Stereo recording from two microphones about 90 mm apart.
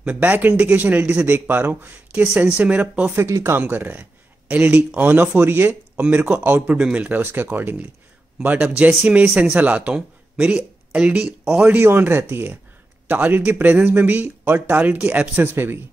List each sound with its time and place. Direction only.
0.0 s speech: 15° right (ahead or behind)
2.2 s a man's voice: 10° right (ahead or behind)
3.2 s speech: 35° right (ahead or behind)
3.5 s a man's voice: 20° right (ahead or behind)
11.8 s speech: 25° right (ahead or behind)